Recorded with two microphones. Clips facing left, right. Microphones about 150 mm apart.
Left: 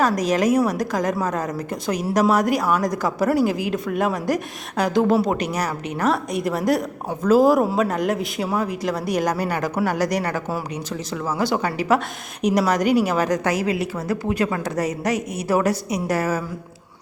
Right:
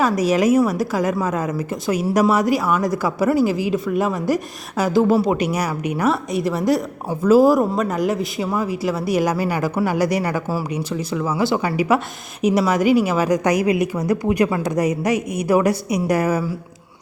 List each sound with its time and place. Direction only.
0.0 s a woman's voice: 5° right (ahead or behind)